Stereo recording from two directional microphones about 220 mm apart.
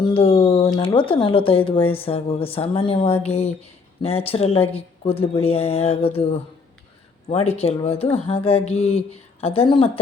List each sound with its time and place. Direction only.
0.0 s speech: 25° left (ahead or behind)